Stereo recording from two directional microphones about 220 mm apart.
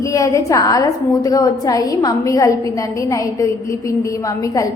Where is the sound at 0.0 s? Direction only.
15° left (ahead or behind).